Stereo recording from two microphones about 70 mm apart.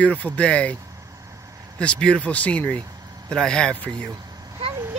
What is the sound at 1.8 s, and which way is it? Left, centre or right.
Speech, centre.